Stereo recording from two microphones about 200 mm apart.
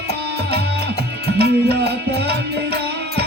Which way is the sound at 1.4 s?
55° right (ahead or behind).